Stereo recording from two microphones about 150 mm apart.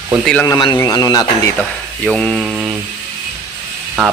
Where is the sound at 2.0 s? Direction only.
5° left (ahead or behind).